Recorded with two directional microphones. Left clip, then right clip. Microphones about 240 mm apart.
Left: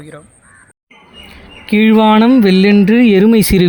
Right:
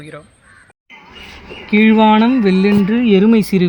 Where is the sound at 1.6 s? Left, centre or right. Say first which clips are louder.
Left 1 dB; left.